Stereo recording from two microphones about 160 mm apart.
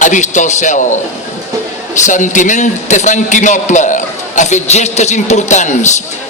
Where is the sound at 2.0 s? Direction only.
50° left (ahead or behind).